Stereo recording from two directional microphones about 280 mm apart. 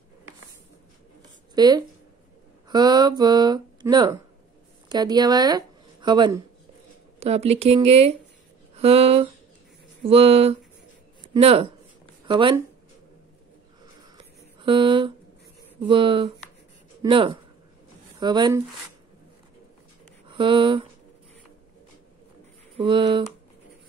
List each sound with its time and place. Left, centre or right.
1.5 s speech: centre
14.1 s a sound: centre
15.9 s speech: centre
20.2 s speech: centre
22.8 s speech: centre